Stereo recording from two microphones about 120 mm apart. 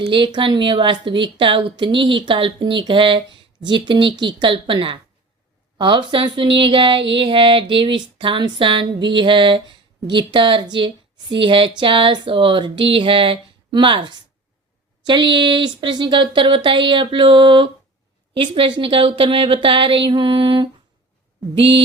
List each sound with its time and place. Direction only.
0.0 s speech: 45° right (ahead or behind)